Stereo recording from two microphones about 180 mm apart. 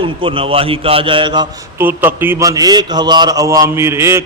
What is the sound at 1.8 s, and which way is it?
A man's voice, 10° right (ahead or behind).